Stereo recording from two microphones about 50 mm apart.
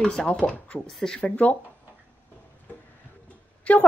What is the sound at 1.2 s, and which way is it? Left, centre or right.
Speech, left.